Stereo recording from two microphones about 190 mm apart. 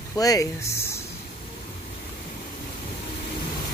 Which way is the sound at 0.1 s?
20° left (ahead or behind).